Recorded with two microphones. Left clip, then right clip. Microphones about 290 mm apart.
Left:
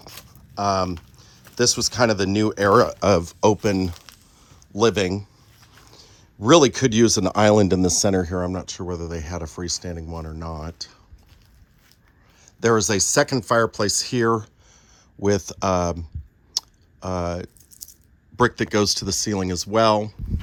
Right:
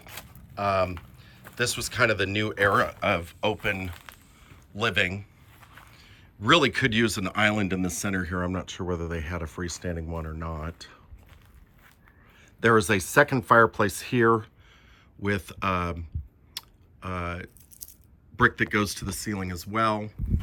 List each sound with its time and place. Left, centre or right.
0.5 s speech: centre
4.1 s a sound: centre
4.7 s speech: centre
5.5 s a sound: centre
5.9 s speech: centre
12.5 s speech: centre
16.6 s clicking: centre
17.7 s a sound: left
18.3 s speech: centre